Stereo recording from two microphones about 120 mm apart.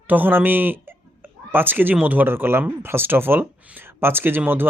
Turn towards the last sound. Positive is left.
turn(degrees=-15)  # may be behind; listen again after turning